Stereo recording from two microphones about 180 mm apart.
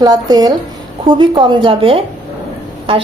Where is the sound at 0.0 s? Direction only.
20° right (ahead or behind).